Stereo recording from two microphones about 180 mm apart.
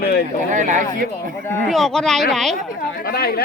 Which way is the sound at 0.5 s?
45° right (ahead or behind).